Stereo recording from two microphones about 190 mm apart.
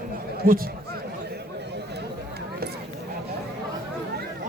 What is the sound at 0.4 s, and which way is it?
Speech, 50° right (ahead or behind).